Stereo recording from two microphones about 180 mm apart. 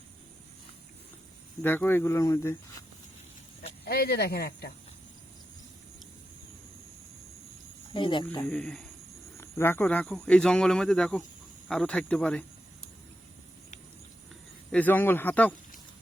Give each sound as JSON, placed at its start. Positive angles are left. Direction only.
{"t": 1.6, "sound": "speech", "side_deg": 10}
{"t": 3.8, "sound": "speech", "side_deg": 60}
{"t": 7.9, "sound": "speech", "side_deg": 25}
{"t": 8.4, "sound": "speech", "side_deg": 0}
{"t": 9.4, "sound": "speech", "side_deg": 10}
{"t": 14.7, "sound": "speech", "side_deg": 10}